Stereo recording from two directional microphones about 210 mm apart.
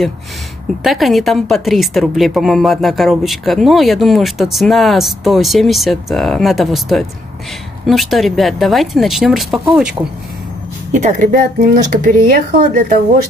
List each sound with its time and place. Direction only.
0.8 s a woman's voice: centre (ahead or behind)
10.9 s speech: 35° right (ahead or behind)